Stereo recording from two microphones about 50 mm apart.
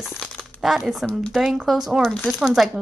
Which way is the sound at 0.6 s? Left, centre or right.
Centre.